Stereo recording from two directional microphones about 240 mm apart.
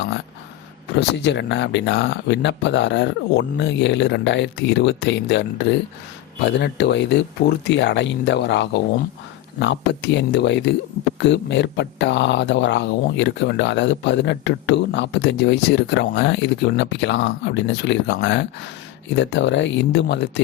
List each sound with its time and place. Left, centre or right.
0.9 s speech: left